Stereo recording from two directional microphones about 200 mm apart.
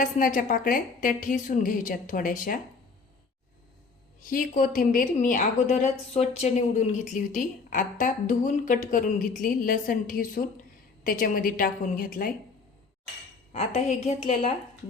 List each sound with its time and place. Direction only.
0.0 s a woman's voice: 40° left (ahead or behind)
4.2 s a woman's voice: 45° left (ahead or behind)
13.5 s a woman's voice: 35° left (ahead or behind)